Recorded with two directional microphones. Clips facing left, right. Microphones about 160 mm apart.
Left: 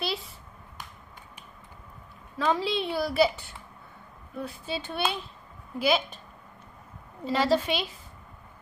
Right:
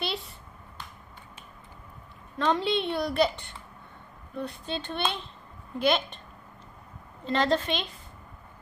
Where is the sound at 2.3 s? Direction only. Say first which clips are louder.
Right 1 dB; 5° left (ahead or behind).